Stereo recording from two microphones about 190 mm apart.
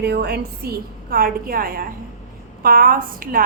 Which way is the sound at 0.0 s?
60° right (ahead or behind).